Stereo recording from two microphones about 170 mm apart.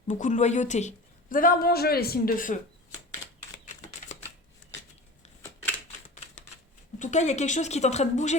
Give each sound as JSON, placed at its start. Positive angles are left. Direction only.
{"t": 0.1, "sound": "a woman's voice", "side_deg": 45}
{"t": 7.0, "sound": "a woman's voice", "side_deg": 45}